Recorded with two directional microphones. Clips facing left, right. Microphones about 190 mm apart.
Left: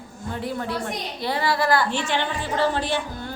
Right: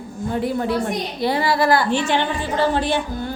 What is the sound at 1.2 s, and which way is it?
A woman's voice, 10° right (ahead or behind).